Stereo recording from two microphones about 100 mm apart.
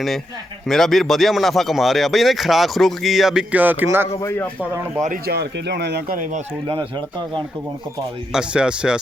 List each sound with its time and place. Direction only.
0.7 s speech: 5° left (ahead or behind)
3.5 s speech: 15° right (ahead or behind)
4.2 s a man's voice: 30° left (ahead or behind)
6.7 s speech: 60° right (ahead or behind)
8.3 s speech: 10° right (ahead or behind)